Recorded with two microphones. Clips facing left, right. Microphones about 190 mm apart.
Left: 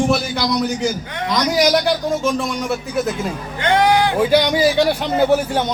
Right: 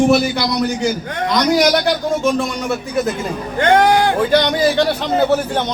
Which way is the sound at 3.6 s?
50° right (ahead or behind).